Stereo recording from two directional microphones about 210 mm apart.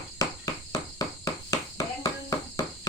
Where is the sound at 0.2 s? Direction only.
15° left (ahead or behind).